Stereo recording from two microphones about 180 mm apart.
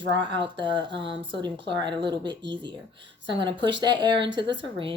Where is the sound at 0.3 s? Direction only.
25° right (ahead or behind).